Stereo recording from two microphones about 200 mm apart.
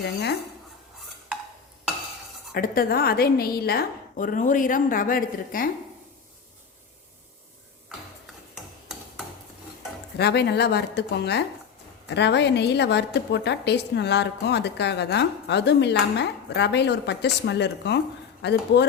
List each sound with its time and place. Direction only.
0.0 s a woman's voice: 55° left (ahead or behind)
2.5 s a woman's voice: 45° left (ahead or behind)
10.2 s a woman's voice: 55° left (ahead or behind)